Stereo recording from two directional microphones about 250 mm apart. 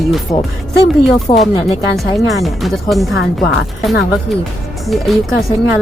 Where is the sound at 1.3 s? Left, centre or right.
Centre.